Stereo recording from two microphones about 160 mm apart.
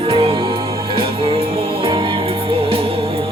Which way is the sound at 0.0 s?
35° right (ahead or behind).